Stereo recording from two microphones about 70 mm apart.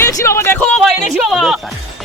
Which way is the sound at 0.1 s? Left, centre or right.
Left.